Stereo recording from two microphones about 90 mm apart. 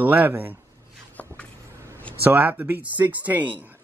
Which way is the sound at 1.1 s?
15° left (ahead or behind).